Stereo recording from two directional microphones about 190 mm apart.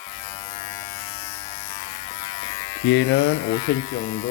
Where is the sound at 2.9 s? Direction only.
65° left (ahead or behind).